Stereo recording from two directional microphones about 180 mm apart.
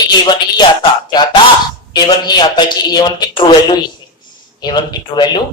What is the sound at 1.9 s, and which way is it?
A man's voice, 25° left (ahead or behind).